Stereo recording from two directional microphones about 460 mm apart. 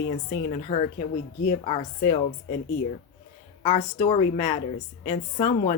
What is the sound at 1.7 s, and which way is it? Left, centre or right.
Speech, centre.